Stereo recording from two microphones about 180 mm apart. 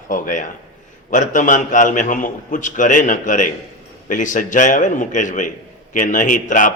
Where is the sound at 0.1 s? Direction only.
45° left (ahead or behind).